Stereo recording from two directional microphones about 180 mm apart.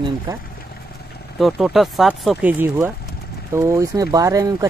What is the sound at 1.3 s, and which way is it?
Speech, 5° right (ahead or behind).